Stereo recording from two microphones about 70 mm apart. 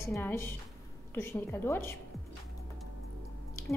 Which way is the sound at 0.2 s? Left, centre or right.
Left.